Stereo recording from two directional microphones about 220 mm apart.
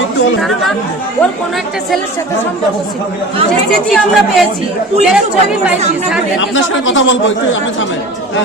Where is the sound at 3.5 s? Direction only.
Centre (ahead or behind).